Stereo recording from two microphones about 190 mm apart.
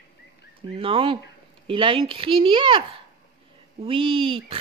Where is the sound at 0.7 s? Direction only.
30° right (ahead or behind).